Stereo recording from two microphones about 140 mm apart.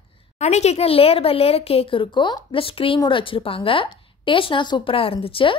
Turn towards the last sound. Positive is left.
turn(degrees=40)  # may be behind; listen again after turning